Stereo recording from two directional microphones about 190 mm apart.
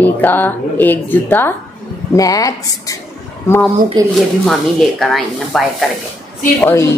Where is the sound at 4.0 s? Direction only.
20° right (ahead or behind).